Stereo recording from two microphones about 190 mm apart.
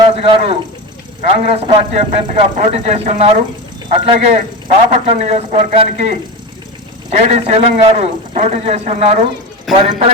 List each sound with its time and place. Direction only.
0.1 s a man's voice: 30° right (ahead or behind)
7.1 s a man's voice: 35° right (ahead or behind)